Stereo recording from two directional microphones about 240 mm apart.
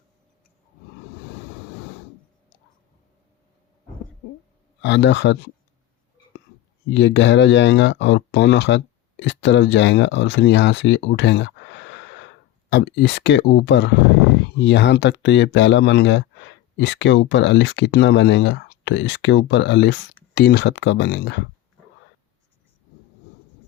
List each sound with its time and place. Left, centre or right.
4.8 s speech: left
6.9 s speech: left